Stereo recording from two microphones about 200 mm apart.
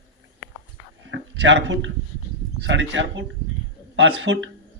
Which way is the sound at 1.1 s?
65° right (ahead or behind).